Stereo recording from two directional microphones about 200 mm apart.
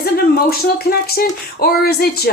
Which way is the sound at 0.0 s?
50° left (ahead or behind).